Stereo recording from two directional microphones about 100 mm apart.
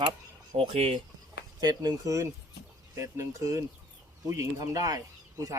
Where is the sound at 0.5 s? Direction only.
80° right.